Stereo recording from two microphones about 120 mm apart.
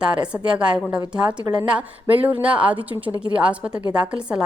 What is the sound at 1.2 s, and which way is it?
Speech, 35° right (ahead or behind).